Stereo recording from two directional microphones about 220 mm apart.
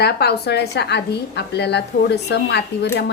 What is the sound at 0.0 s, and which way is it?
A woman's voice, 50° left (ahead or behind).